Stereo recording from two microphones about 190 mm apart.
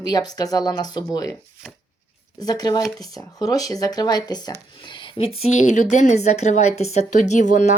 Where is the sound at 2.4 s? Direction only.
20° left (ahead or behind).